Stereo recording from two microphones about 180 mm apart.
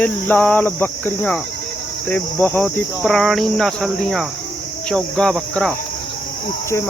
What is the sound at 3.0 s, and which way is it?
Speech, centre (ahead or behind).